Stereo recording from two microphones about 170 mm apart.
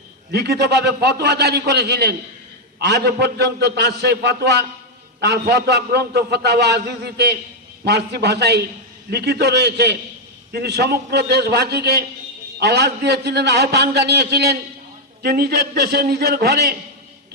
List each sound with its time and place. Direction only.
0.3 s a man's voice: 75° right (ahead or behind)